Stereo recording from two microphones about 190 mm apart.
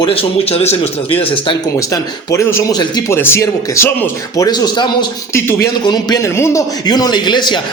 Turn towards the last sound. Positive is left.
turn(degrees=25)  # may be behind; listen again after turning